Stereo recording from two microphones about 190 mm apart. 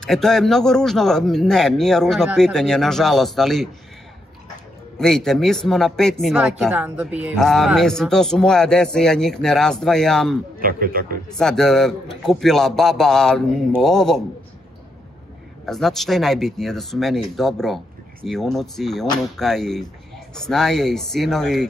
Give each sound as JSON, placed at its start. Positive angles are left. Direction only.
{"t": 0.0, "sound": "speech", "side_deg": 0}
{"t": 4.9, "sound": "speech", "side_deg": 0}
{"t": 10.6, "sound": "a man's voice", "side_deg": -50}
{"t": 11.2, "sound": "speech", "side_deg": 5}
{"t": 15.6, "sound": "speech", "side_deg": 0}